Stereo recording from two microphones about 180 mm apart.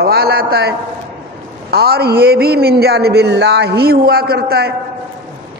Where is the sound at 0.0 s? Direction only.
60° right (ahead or behind).